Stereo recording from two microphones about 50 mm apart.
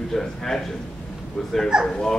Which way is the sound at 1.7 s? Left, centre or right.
Centre.